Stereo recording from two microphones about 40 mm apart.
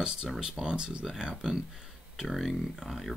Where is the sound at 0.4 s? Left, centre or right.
Right.